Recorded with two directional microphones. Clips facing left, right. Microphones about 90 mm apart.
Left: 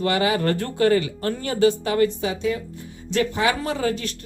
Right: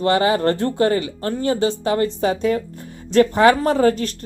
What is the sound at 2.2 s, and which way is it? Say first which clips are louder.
Speech: right 5 dB; 45° right (ahead or behind).